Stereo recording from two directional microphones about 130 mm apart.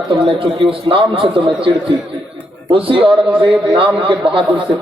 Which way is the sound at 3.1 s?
5° right (ahead or behind).